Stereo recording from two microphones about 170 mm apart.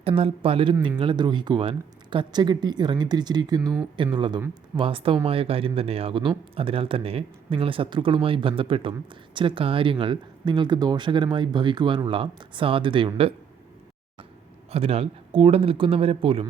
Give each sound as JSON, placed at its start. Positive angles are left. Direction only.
{"t": 0.0, "sound": "speech", "side_deg": -35}
{"t": 14.7, "sound": "speech", "side_deg": -35}